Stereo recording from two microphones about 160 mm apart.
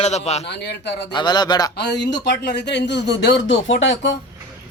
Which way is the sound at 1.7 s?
90° left.